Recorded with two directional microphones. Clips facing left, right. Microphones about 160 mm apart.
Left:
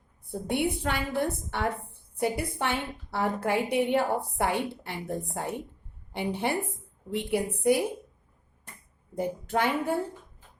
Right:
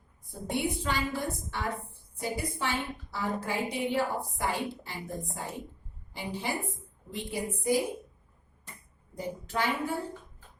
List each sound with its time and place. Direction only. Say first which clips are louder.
0.3 s a woman's voice: left 4 dB; 60° left (ahead or behind)
9.1 s a woman's voice: left 5 dB; 55° left (ahead or behind)